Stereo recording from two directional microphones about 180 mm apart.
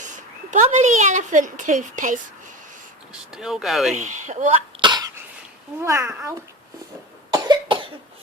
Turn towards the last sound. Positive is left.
turn(degrees=-25)  # may be behind; listen again after turning